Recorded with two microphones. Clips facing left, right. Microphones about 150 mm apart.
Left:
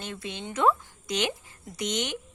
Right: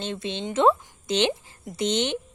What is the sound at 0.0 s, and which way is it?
A woman's voice, 25° right (ahead or behind).